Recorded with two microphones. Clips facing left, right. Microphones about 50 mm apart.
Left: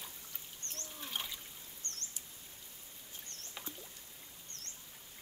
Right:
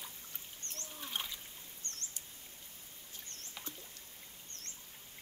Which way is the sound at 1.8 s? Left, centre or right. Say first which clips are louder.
Left 1 dB; left.